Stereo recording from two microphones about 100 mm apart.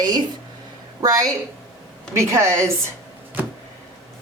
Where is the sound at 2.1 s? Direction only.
30° right (ahead or behind).